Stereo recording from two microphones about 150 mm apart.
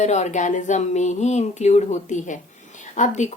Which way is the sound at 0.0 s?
50° left (ahead or behind).